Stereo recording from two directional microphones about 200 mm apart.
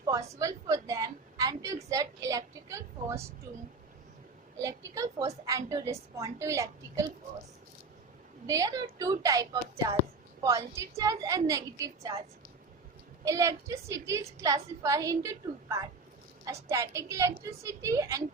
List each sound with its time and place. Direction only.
0.1 s a woman's voice: 15° right (ahead or behind)
4.5 s a woman's voice: 15° right (ahead or behind)
8.4 s a woman's voice: 15° right (ahead or behind)
13.2 s a woman's voice: 15° right (ahead or behind)